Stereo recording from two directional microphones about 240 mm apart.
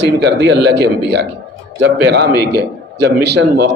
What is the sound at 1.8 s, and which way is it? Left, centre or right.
A man's voice, right.